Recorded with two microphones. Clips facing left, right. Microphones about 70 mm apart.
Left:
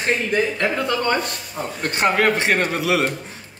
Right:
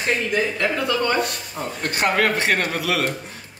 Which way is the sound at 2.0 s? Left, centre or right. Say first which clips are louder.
Left 2 dB; left.